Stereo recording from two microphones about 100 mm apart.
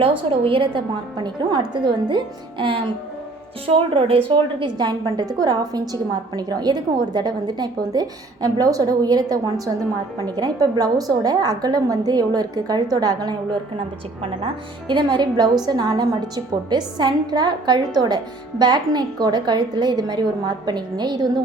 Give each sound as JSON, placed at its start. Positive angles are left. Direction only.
{"t": 0.0, "sound": "a woman's voice", "side_deg": -65}
{"t": 3.7, "sound": "speech", "side_deg": -65}
{"t": 4.3, "sound": "a woman's voice", "side_deg": -50}
{"t": 13.7, "sound": "a woman's voice", "side_deg": -60}